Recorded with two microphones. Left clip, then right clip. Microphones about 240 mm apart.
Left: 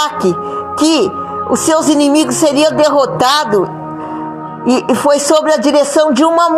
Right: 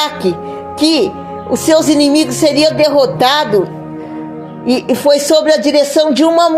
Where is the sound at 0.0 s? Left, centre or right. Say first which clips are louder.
Left 2 dB; left.